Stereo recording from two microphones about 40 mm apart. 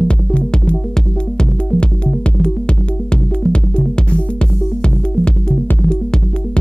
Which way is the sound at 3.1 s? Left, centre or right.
Left.